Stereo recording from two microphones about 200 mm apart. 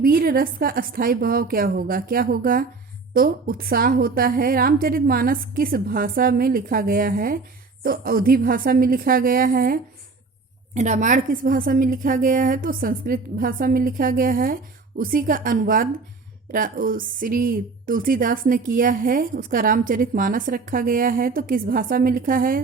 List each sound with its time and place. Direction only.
0.0 s speech: 45° right (ahead or behind)
10.8 s speech: 35° right (ahead or behind)